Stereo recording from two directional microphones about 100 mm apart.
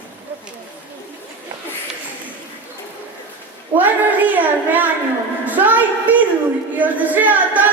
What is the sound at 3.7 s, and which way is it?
A child's voice, 15° right (ahead or behind).